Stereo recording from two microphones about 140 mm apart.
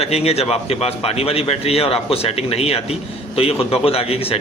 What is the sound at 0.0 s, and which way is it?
A man's voice, 45° left (ahead or behind).